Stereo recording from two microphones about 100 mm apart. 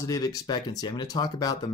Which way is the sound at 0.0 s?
35° left (ahead or behind).